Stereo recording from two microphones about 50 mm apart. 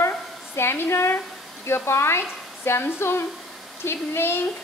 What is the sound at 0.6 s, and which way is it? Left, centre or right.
A woman's voice, left.